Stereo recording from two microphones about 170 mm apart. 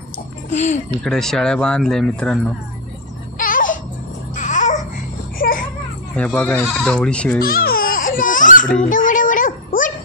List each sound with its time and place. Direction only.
0.5 s speech: 40° left (ahead or behind)
1.0 s speech: 5° left (ahead or behind)
3.3 s music: 55° left (ahead or behind)
4.4 s babbling: 45° left (ahead or behind)
6.1 s speech: 10° left (ahead or behind)
7.4 s music: 60° left (ahead or behind)
8.8 s a sound: 50° left (ahead or behind)